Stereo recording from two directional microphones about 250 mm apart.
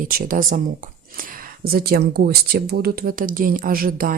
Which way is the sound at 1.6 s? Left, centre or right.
Right.